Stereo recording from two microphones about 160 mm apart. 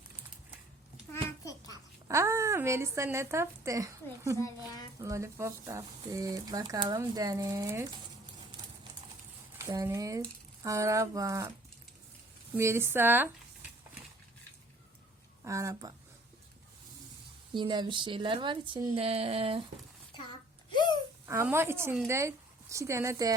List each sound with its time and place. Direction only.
1.1 s babbling: 20° left (ahead or behind)
1.7 s speech: 20° right (ahead or behind)
4.4 s a child's voice: 20° left (ahead or behind)
4.9 s speech: 20° right (ahead or behind)
9.6 s speech: 15° right (ahead or behind)
12.5 s speech: 15° right (ahead or behind)
15.4 s speech: 20° right (ahead or behind)
17.5 s speech: 30° right (ahead or behind)
20.7 s a sound: 30° left (ahead or behind)
21.2 s speech: 15° right (ahead or behind)